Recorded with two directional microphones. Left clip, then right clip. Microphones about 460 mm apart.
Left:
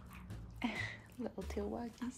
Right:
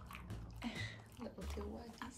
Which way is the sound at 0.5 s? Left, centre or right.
Centre.